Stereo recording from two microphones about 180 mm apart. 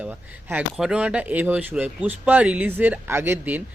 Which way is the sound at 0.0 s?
10° right (ahead or behind).